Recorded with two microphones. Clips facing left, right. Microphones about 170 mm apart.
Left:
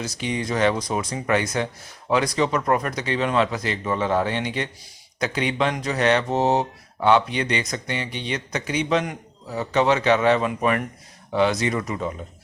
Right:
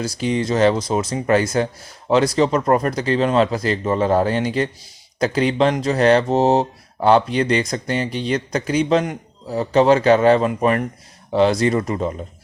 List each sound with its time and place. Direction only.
0.0 s speech: 30° right (ahead or behind)